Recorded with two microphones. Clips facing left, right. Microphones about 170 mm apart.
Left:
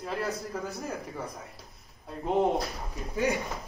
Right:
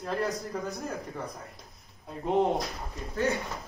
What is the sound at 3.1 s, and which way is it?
Speech, 15° left (ahead or behind).